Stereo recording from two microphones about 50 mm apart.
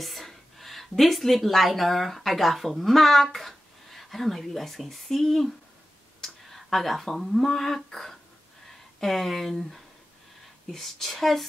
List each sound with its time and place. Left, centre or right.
0.0 s speech: centre